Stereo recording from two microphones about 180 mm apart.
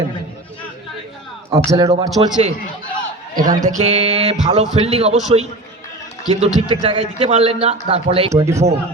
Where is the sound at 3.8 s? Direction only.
35° right (ahead or behind).